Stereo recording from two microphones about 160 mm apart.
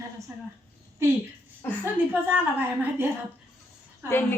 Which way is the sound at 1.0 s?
15° right (ahead or behind).